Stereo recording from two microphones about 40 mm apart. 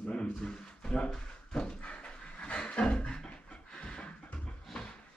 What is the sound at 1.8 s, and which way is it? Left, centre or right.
Pant, left.